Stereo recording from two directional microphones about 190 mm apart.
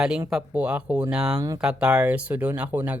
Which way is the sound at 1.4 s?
20° right (ahead or behind).